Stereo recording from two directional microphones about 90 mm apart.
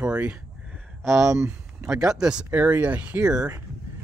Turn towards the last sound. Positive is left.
turn(degrees=-10)  # may be behind; listen again after turning